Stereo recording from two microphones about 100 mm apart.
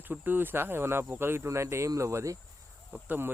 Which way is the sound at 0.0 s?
20° right (ahead or behind).